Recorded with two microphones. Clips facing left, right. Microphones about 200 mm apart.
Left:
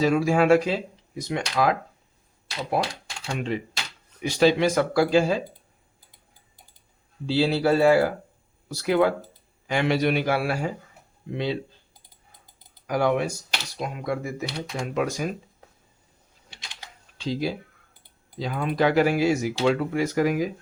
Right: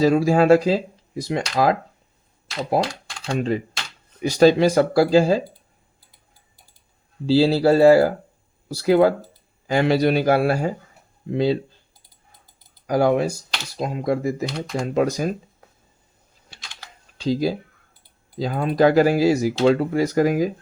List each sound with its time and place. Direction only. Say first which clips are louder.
0.0 s speech: right 4 dB; 35° right (ahead or behind)
3.2 s speech: right 6 dB; 35° right (ahead or behind)
7.3 s speech: right 6 dB; 35° right (ahead or behind)
12.9 s speech: right 5 dB; 35° right (ahead or behind)
17.2 s speech: right 6 dB; 40° right (ahead or behind)